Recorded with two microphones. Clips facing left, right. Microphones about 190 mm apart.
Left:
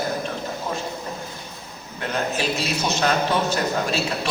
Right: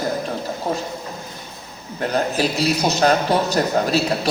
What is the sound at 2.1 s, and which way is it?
A man's voice, 35° right (ahead or behind).